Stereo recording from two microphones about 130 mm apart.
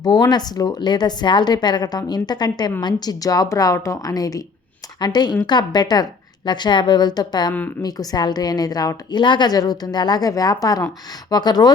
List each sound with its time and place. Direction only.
0.0 s a woman's voice: 30° left (ahead or behind)